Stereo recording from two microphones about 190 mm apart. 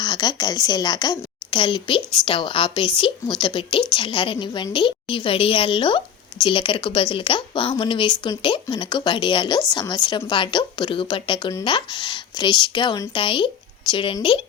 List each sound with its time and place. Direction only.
0.0 s a woman's voice: 20° left (ahead or behind)